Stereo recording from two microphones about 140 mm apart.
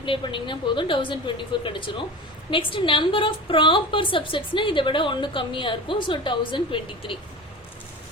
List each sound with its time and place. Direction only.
0.0 s a woman's voice: 35° left (ahead or behind)